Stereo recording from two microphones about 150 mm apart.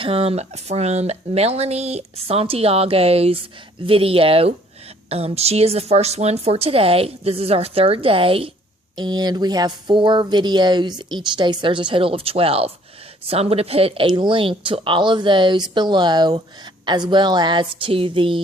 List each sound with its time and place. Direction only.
0.0 s a woman's voice: 40° right (ahead or behind)